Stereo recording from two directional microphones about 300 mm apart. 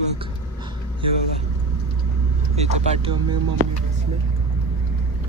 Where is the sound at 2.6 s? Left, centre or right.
Centre.